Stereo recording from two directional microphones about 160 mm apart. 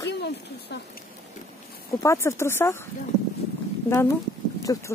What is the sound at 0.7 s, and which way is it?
Speech, 90° left.